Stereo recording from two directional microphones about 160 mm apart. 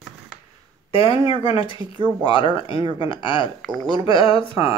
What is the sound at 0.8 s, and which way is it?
Speech, 35° left (ahead or behind).